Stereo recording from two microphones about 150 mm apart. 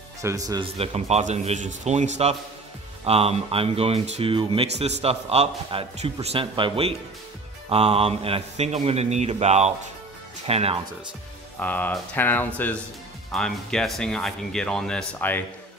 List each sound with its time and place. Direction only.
0.2 s speech: 20° right (ahead or behind)
0.7 s a man's voice: 45° right (ahead or behind)
11.6 s speech: 10° left (ahead or behind)